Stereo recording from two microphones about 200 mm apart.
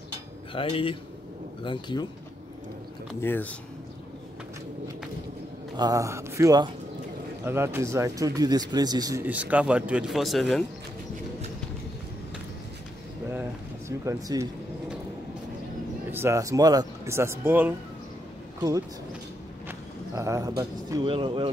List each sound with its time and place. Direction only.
0.6 s speech: 25° left (ahead or behind)
3.2 s speech: 10° left (ahead or behind)
5.8 s speech: 15° right (ahead or behind); by 10.6 s centre (ahead or behind)
13.3 s a sound: 10° right (ahead or behind)
16.1 s speech: 15° right (ahead or behind)
20.2 s speech: 15° right (ahead or behind)